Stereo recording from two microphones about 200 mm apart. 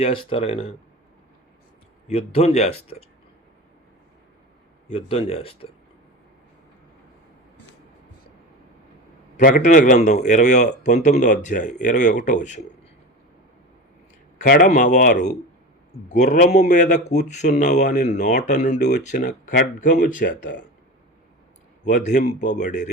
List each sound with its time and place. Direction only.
0.0 s speech: 30° left (ahead or behind)
2.0 s a man's voice: 30° left (ahead or behind)
4.9 s speech: 30° left (ahead or behind)
9.4 s a man's voice: 40° left (ahead or behind)
14.4 s a man's voice: 45° left (ahead or behind)
21.8 s a man's voice: 35° left (ahead or behind)